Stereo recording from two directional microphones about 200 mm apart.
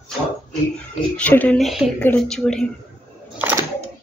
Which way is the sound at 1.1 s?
10° left (ahead or behind).